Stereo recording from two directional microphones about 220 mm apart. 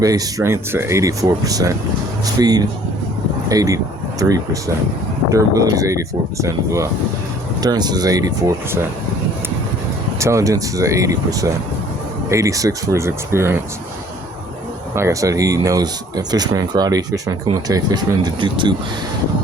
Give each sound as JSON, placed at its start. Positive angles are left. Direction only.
{"t": 0.0, "sound": "speech", "side_deg": -15}
{"t": 5.3, "sound": "speech", "side_deg": -15}
{"t": 10.2, "sound": "speech", "side_deg": -15}
{"t": 14.9, "sound": "speech", "side_deg": -15}